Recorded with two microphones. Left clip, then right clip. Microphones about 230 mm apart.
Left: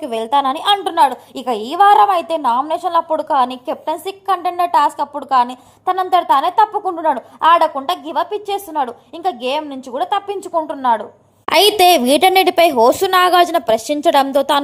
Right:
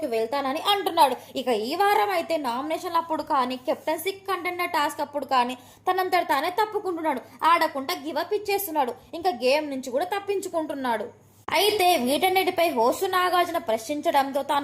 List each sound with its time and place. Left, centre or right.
0.0 s a woman's voice: left; by 11.0 s centre
11.4 s a woman's voice: left